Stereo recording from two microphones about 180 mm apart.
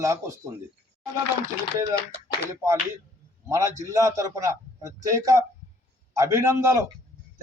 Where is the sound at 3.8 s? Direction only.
15° right (ahead or behind).